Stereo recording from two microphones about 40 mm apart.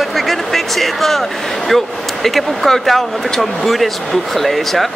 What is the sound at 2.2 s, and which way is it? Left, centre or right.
Speech, centre.